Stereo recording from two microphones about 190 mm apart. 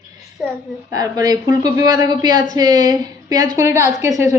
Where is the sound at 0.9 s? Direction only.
20° right (ahead or behind).